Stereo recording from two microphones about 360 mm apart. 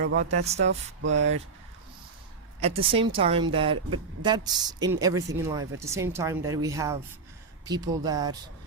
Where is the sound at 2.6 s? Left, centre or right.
Centre.